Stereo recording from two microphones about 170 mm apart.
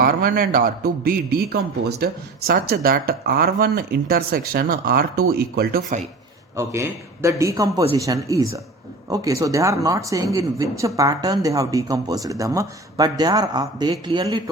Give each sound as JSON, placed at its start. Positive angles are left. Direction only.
{"t": 0.0, "sound": "speech", "side_deg": -55}
{"t": 6.6, "sound": "a man's voice", "side_deg": -15}